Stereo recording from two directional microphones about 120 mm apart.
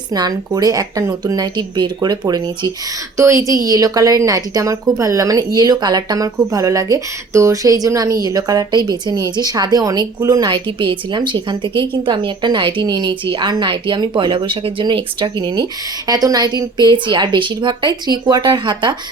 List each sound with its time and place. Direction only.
0.1 s a woman's voice: 30° right (ahead or behind)
3.2 s a woman's voice: 25° right (ahead or behind)
10.5 s a woman's voice: 40° right (ahead or behind)